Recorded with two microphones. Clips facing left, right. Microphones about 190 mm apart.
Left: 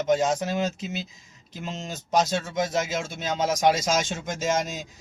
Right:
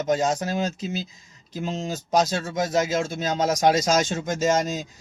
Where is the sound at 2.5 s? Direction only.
Centre (ahead or behind).